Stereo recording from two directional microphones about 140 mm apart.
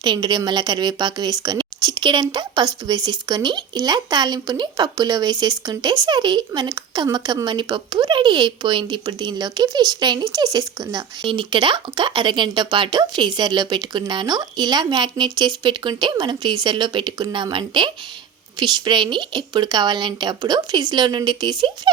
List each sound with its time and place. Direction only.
0.0 s speech: 30° right (ahead or behind)